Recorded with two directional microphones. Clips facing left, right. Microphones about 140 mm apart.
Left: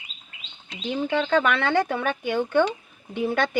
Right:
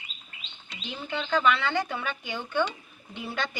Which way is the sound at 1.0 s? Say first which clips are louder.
Left 3 dB; 65° left (ahead or behind).